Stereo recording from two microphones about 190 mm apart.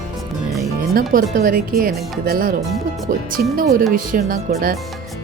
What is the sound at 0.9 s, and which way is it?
Speech, 50° right (ahead or behind).